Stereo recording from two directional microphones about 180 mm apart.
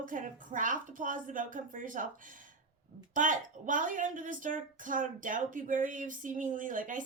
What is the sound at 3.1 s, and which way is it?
A woman's voice, 45° right (ahead or behind).